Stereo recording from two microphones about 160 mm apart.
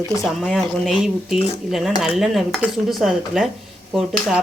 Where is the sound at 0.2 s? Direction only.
Centre (ahead or behind).